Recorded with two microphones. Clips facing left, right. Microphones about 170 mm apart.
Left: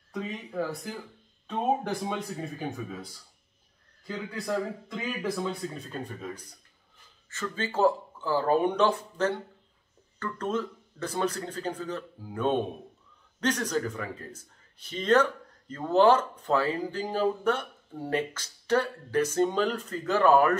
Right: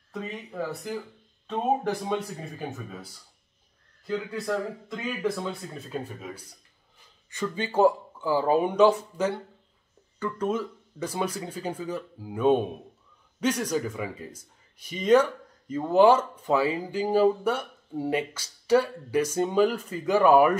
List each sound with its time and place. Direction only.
0.1 s speech: centre (ahead or behind)
4.1 s speech: centre (ahead or behind)